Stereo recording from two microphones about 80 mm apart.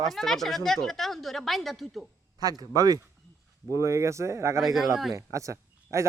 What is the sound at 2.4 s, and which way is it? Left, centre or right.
Speech, right.